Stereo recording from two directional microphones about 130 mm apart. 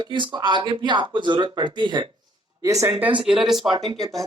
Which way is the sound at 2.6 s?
25° right (ahead or behind).